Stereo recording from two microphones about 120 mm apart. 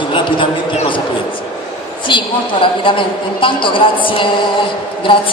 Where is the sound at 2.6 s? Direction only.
45° left (ahead or behind).